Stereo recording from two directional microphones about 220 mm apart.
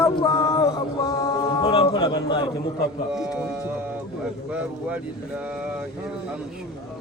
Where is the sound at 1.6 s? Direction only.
25° left (ahead or behind).